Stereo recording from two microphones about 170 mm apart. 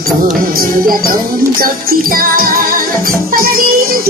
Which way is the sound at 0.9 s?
55° right (ahead or behind).